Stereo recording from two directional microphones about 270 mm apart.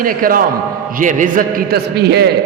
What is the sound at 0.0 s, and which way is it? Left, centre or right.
A man's voice, right.